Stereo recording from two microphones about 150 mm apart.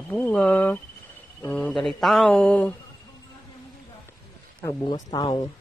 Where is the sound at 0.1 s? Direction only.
10° left (ahead or behind).